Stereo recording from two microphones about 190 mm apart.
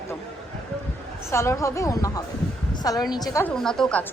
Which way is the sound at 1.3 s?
15° left (ahead or behind).